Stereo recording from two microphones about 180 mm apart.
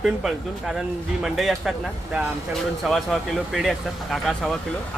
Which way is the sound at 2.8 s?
Centre (ahead or behind).